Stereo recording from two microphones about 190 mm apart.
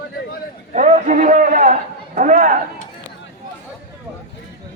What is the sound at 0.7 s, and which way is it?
A man's voice, 40° right (ahead or behind).